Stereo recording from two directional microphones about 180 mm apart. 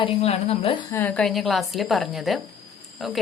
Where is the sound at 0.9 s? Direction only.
10° left (ahead or behind).